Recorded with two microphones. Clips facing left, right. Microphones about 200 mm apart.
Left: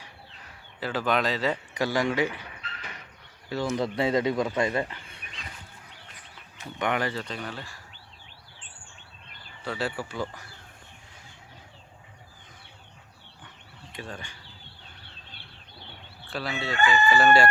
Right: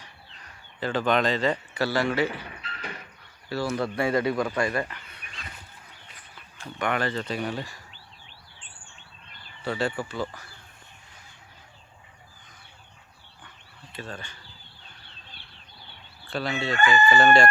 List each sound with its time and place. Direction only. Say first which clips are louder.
0.0 s bird: left 2 dB; 5° left (ahead or behind)
1.7 s speech: right 1 dB; 15° left (ahead or behind)
3.5 s speech: even; 20° left (ahead or behind)
6.6 s speech: even; 20° left (ahead or behind)
7.3 s speech: right 6 dB; 10° right (ahead or behind)
9.6 s speech: right 3 dB; 5° left (ahead or behind)
13.9 s speech: right 1 dB; 15° left (ahead or behind)
16.3 s crowing: right 3 dB; centre (ahead or behind)